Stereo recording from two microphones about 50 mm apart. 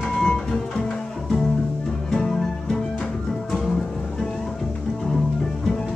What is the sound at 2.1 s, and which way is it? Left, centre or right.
Music, centre.